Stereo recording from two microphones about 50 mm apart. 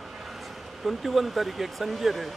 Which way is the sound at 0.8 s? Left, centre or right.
Centre.